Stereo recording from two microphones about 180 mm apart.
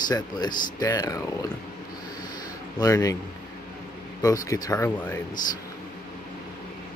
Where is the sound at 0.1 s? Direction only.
20° left (ahead or behind).